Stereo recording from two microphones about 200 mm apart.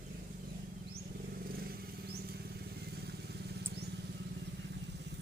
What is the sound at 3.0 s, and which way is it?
Vehicle, 55° right (ahead or behind).